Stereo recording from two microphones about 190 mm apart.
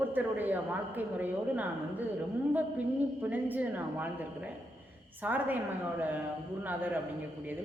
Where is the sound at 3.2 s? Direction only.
10° right (ahead or behind).